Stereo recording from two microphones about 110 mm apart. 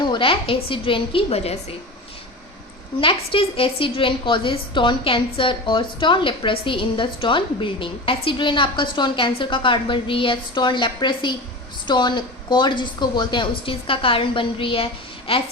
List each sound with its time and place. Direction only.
0.0 s a woman's voice: 50° left (ahead or behind); by 1.5 s 70° left (ahead or behind)
3.0 s a woman's voice: 55° left (ahead or behind)